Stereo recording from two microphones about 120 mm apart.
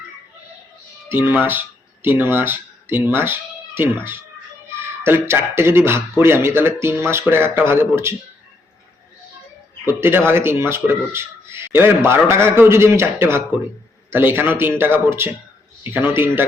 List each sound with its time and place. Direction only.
1.1 s a man's voice: 15° right (ahead or behind)
9.8 s a man's voice: 20° right (ahead or behind)